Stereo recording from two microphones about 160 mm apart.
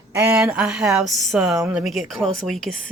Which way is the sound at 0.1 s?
15° right (ahead or behind).